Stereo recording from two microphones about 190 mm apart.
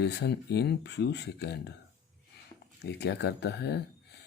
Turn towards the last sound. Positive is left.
turn(degrees=60)  # may be behind; listen again after turning